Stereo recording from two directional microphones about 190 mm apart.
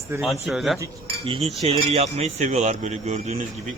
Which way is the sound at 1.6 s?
35° right (ahead or behind).